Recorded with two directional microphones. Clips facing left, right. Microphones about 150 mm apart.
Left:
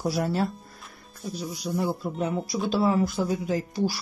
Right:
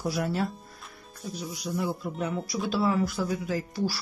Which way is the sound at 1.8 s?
30° left (ahead or behind).